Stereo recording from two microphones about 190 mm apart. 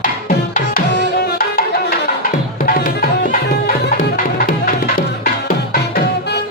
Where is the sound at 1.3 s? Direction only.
50° left (ahead or behind).